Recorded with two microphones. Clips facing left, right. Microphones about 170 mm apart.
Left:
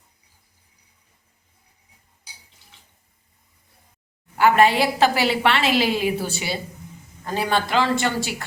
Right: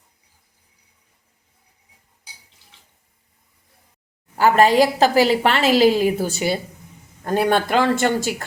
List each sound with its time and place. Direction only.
4.4 s a woman's voice: 40° right (ahead or behind)